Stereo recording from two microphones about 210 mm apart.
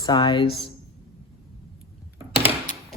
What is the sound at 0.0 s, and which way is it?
Speech, 20° left (ahead or behind).